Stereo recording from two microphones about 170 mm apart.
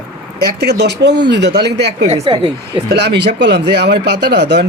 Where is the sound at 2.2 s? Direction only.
30° right (ahead or behind).